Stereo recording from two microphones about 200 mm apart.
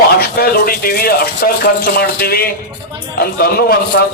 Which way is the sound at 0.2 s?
50° left (ahead or behind).